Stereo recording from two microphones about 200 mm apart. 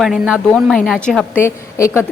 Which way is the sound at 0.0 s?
5° right (ahead or behind).